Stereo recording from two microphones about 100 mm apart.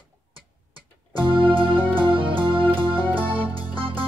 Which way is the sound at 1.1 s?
55° right (ahead or behind).